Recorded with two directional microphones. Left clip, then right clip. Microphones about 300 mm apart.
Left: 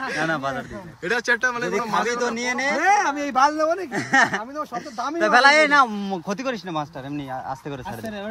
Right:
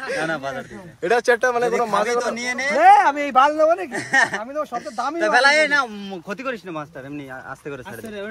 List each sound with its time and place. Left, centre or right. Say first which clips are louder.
0.3 s a man's voice: left 1 dB; left
1.0 s speech: right 4 dB; centre
2.1 s a man's voice: right 1 dB; centre
2.8 s speech: right 9 dB; centre
3.9 s a man's voice: even; left
4.6 s speech: right 3 dB; centre
5.2 s a man's voice: left 1 dB; left